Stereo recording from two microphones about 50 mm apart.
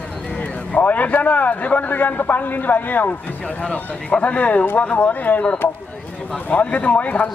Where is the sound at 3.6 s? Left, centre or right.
Left.